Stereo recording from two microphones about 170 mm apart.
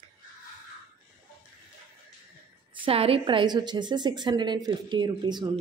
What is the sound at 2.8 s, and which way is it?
Speech, 35° right (ahead or behind).